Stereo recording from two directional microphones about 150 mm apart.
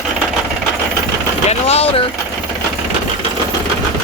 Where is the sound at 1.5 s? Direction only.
40° left (ahead or behind).